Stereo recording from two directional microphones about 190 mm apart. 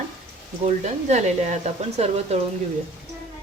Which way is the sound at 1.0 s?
35° right (ahead or behind).